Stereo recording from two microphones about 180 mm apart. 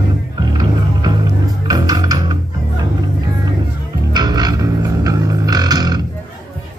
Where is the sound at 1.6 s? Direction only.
20° right (ahead or behind).